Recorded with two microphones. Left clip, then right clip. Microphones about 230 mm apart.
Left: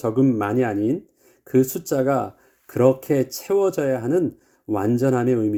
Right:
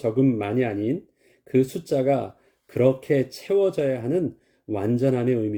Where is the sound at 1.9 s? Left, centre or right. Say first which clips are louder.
Left 1 dB; left.